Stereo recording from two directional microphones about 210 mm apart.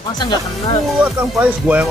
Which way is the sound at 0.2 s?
20° left (ahead or behind).